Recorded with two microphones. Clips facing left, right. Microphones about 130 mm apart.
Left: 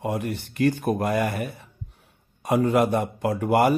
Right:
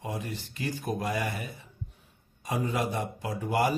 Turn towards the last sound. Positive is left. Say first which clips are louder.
# left 8 dB
turn(degrees=65)  # may be behind; listen again after turning